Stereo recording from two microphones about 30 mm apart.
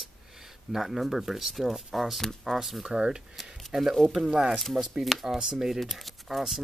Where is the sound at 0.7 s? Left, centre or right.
Centre.